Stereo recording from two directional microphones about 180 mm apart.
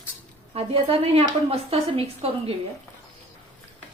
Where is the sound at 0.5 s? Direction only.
30° right (ahead or behind).